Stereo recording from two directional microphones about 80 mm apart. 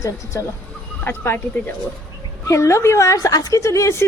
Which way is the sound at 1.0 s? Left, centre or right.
Left.